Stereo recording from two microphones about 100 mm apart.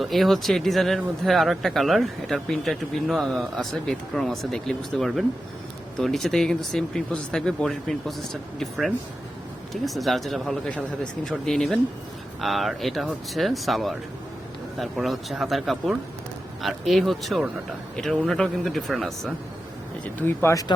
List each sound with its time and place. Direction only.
0.0 s speech: centre (ahead or behind)
20.1 s speech: 25° left (ahead or behind)